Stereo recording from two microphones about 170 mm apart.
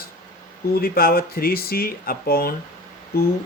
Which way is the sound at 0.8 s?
60° left (ahead or behind).